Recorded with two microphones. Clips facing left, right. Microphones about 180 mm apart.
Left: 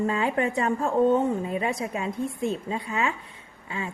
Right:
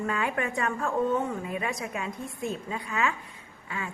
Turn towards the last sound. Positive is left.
turn(degrees=25)  # may be behind; listen again after turning